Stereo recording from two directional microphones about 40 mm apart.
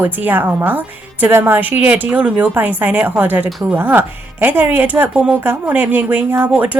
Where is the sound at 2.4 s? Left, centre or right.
Right.